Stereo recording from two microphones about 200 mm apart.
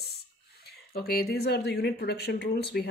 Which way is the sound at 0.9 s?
50° left (ahead or behind).